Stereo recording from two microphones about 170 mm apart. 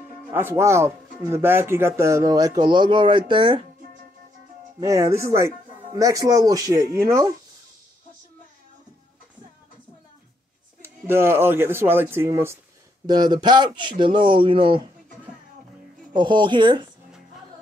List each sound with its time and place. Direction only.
0.3 s speech: 10° right (ahead or behind); by 3.6 s 30° right (ahead or behind)
4.7 s speech: 20° right (ahead or behind)
10.8 s speech: 15° right (ahead or behind); by 14.8 s 30° right (ahead or behind)
16.2 s speech: 25° right (ahead or behind)